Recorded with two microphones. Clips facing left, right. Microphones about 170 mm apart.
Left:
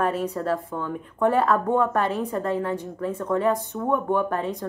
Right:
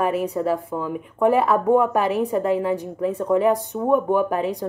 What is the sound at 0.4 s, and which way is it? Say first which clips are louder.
Speech: right 3 dB; 15° right (ahead or behind).